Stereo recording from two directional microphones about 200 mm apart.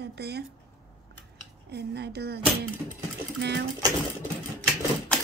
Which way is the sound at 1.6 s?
55° right (ahead or behind).